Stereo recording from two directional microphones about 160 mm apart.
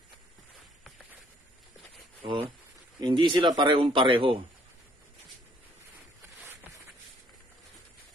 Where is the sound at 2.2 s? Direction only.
35° right (ahead or behind).